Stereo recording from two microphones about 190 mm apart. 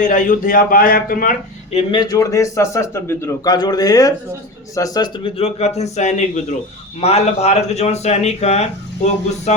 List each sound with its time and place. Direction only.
0.0 s a man's voice: 45° left (ahead or behind)
1.7 s a man's voice: 25° left (ahead or behind)